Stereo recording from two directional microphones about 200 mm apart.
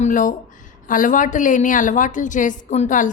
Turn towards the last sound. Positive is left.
turn(degrees=40)  # may be behind; listen again after turning